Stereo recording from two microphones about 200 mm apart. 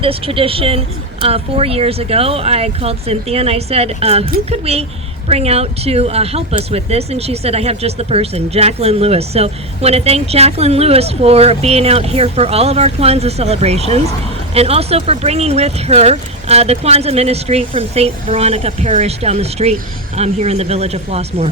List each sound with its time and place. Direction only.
0.0 s a woman's voice: 30° right (ahead or behind)